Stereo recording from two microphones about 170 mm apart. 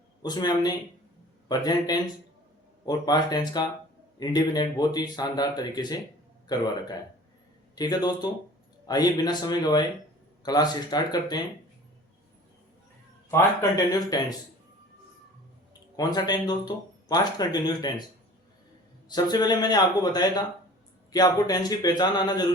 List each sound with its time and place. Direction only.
0.2 s speech: 25° left (ahead or behind)
7.8 s speech: 25° left (ahead or behind)
13.3 s speech: 20° left (ahead or behind)
16.0 s speech: 25° left (ahead or behind)
19.0 s speech: 25° left (ahead or behind)